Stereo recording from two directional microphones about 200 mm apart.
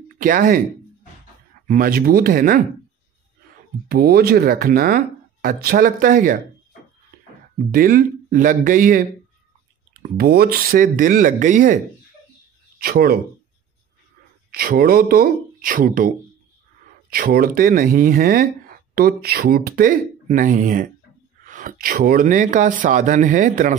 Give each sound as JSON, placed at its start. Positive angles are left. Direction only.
{"t": 0.2, "sound": "speech", "side_deg": -45}
{"t": 1.7, "sound": "speech", "side_deg": -45}
{"t": 3.9, "sound": "speech", "side_deg": -50}
{"t": 7.7, "sound": "speech", "side_deg": -45}
{"t": 10.0, "sound": "speech", "side_deg": -50}
{"t": 14.5, "sound": "speech", "side_deg": -50}